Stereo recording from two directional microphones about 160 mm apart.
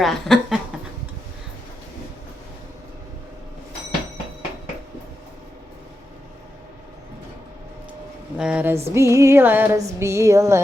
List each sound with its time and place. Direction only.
0.0 s a sound: centre (ahead or behind)
8.4 s speech: 5° right (ahead or behind)
8.9 s music: 20° right (ahead or behind)